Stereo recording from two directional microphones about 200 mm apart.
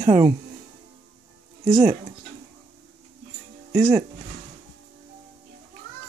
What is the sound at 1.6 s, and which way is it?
Speech, 15° right (ahead or behind).